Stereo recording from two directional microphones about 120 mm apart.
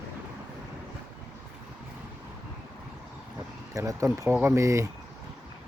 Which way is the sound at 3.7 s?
25° right (ahead or behind).